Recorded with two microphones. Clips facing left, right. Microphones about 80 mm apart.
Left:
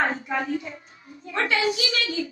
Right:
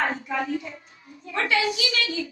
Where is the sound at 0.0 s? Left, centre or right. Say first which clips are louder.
Left 1 dB; left.